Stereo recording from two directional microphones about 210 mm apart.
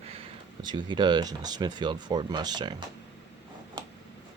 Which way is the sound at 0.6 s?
20° right (ahead or behind).